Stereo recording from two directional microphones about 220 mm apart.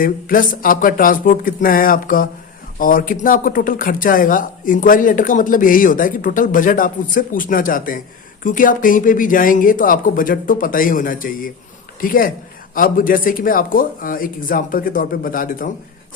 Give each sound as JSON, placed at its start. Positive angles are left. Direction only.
{"t": 0.0, "sound": "speech", "side_deg": 40}